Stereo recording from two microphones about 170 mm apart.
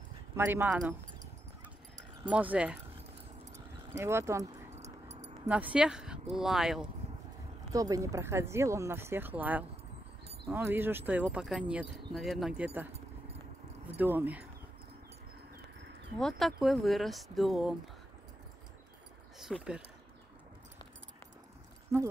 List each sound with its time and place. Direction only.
0.4 s speech: 10° right (ahead or behind)
2.2 s speech: 10° right (ahead or behind)
3.9 s speech: 15° right (ahead or behind)
4.7 s dog: 40° right (ahead or behind)
5.5 s speech: 10° right (ahead or behind)
7.7 s speech: 20° right (ahead or behind)
13.9 s speech: 10° right (ahead or behind)
16.2 s speech: centre (ahead or behind)
19.4 s speech: 5° right (ahead or behind)